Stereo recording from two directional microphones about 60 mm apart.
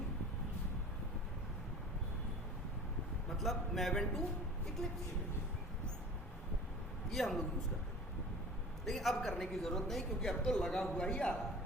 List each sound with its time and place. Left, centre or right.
3.2 s a man's voice: centre
7.1 s a man's voice: centre
8.8 s a man's voice: centre